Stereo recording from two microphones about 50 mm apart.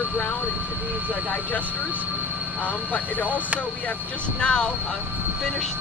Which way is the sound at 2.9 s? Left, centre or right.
Left.